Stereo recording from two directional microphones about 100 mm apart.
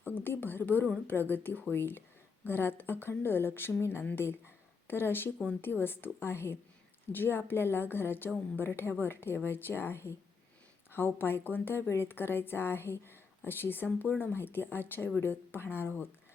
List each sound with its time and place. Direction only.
0.0 s a woman's voice: 20° left (ahead or behind)